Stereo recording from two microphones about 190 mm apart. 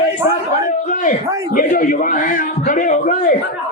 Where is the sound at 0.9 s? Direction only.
40° left (ahead or behind).